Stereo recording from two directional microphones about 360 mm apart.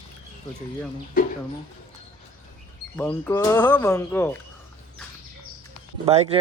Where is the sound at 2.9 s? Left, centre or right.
Centre.